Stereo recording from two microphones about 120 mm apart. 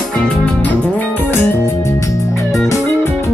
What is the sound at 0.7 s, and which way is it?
Music, 15° left (ahead or behind).